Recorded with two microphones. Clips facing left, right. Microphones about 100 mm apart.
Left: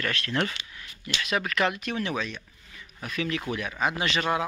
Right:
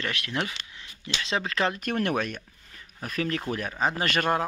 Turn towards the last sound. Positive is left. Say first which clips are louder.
# right 1 dB
turn(degrees=-45)  # may be behind; listen again after turning